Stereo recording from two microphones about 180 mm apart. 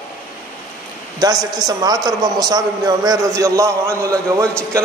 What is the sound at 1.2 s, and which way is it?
A man's voice, 20° right (ahead or behind).